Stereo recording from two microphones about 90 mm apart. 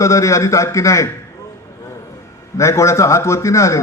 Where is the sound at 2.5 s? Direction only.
35° left (ahead or behind).